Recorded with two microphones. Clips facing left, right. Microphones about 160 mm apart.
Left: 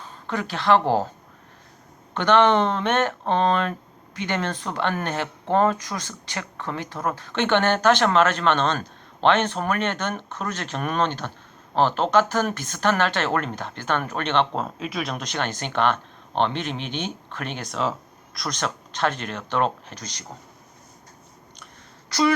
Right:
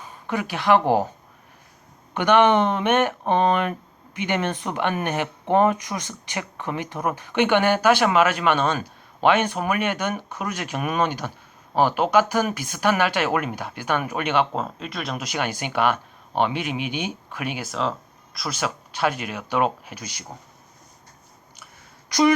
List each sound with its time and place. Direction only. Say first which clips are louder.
0.0 s speech: right 1 dB; 10° right (ahead or behind)
2.1 s speech: right 1 dB; 15° right (ahead or behind)
22.1 s speech: right 3 dB; 15° right (ahead or behind)